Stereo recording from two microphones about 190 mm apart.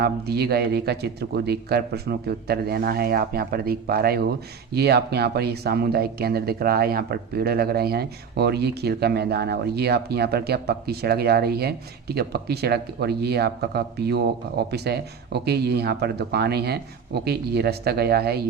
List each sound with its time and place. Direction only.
0.0 s speech: 55° right (ahead or behind)